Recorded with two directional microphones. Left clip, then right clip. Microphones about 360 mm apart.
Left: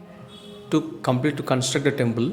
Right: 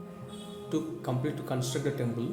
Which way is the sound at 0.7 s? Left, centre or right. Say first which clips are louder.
Left 10 dB; right.